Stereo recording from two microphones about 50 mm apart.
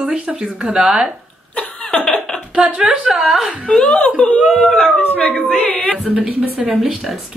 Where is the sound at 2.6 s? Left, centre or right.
Right.